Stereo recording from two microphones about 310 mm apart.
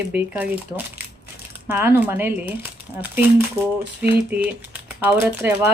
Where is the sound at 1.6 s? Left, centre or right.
Centre.